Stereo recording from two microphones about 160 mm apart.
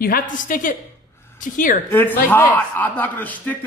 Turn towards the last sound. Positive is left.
turn(degrees=10)  # may be behind; listen again after turning